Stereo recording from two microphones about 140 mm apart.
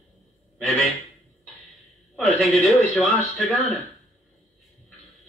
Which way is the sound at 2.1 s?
Centre (ahead or behind).